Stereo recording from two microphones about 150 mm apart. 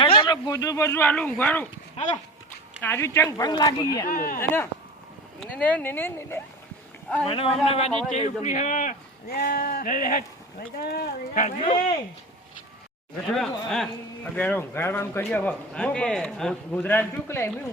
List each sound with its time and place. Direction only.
0.0 s speech: 35° left (ahead or behind); by 1.6 s 10° left (ahead or behind)
2.0 s a man's voice: 45° left (ahead or behind)
2.8 s speech: 15° left (ahead or behind)
4.1 s speech: 65° left (ahead or behind)
4.4 s speech: 15° left (ahead or behind)
7.3 s a man's voice: 40° left (ahead or behind); by 10.2 s 65° left (ahead or behind)
10.8 s speech: 90° left
13.3 s speech: 5° left (ahead or behind)